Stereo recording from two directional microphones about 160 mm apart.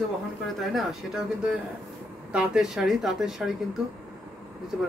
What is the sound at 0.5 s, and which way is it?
Speech, centre (ahead or behind).